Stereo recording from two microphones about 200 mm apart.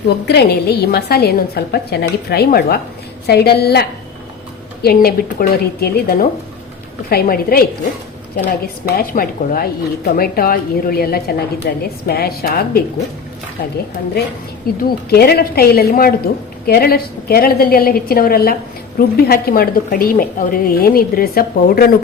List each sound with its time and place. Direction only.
0.3 s a woman's voice: 55° left (ahead or behind)
8.6 s a woman's voice: 45° left (ahead or behind)
14.8 s a woman's voice: 50° left (ahead or behind)